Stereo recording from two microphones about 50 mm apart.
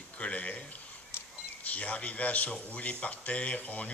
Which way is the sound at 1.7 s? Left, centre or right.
Left.